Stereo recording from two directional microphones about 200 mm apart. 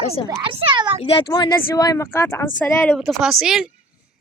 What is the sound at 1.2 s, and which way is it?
A child's voice, 25° left (ahead or behind).